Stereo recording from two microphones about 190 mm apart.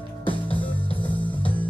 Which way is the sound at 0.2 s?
25° left (ahead or behind).